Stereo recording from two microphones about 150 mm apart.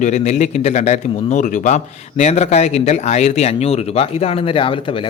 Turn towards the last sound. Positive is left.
turn(degrees=35)  # may be behind; listen again after turning